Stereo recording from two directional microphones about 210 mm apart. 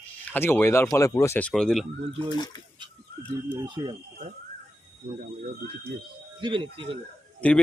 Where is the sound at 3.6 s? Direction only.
20° right (ahead or behind).